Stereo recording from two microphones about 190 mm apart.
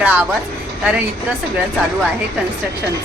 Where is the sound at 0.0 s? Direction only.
10° right (ahead or behind).